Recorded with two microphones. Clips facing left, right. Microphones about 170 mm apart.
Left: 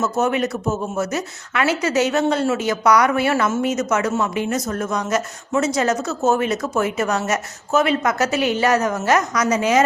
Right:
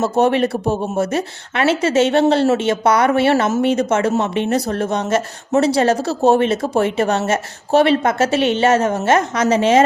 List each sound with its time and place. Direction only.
0.0 s speech: 30° right (ahead or behind)